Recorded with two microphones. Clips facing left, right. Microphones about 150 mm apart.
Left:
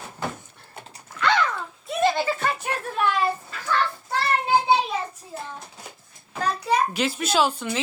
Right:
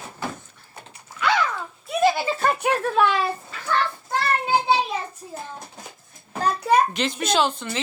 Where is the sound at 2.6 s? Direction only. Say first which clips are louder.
Right 7 dB; 90° right.